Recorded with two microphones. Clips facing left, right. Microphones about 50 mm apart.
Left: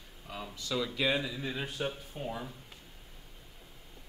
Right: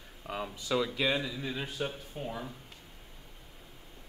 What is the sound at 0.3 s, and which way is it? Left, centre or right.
Speech, right.